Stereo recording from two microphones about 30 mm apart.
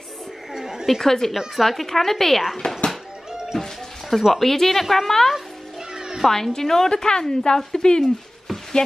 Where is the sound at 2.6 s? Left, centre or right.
Left.